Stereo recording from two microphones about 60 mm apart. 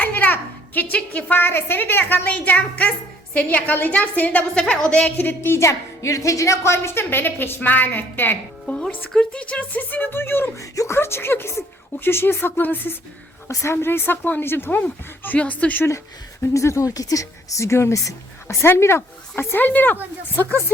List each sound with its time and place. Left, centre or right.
0.0 s a sound: left
0.9 s a woman's voice: left
4.7 s a woman's voice: centre
5.1 s speech: left
8.6 s music: centre
9.1 s speech: centre; by 10.5 s left
10.6 s speech: left
13.5 s speech: left
16.6 s speech: left
16.9 s speech: left
17.7 s speech: left
19.5 s speech: left